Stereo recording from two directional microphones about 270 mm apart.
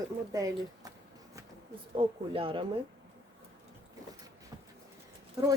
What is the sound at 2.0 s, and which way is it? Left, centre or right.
Speech, centre.